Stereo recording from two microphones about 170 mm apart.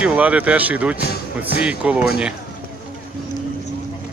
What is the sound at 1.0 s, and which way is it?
Speech, 70° left (ahead or behind).